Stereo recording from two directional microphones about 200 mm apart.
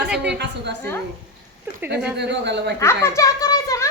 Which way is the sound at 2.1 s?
60° right (ahead or behind).